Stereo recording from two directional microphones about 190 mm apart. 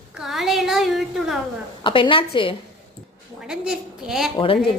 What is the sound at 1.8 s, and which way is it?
Speech, 25° left (ahead or behind).